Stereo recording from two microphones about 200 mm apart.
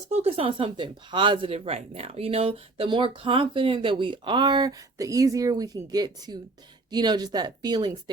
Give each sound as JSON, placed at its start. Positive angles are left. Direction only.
{"t": 0.1, "sound": "speech", "side_deg": -30}